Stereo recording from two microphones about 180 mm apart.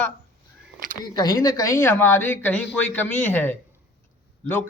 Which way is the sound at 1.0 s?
20° left (ahead or behind).